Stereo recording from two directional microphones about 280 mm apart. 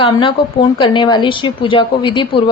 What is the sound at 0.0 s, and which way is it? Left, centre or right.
A woman's voice, centre.